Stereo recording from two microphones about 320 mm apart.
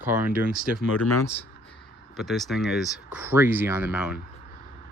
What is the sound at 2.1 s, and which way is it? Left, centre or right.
Speech, centre.